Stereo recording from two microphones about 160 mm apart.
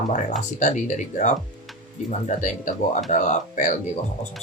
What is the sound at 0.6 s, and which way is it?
Speech, 50° left (ahead or behind).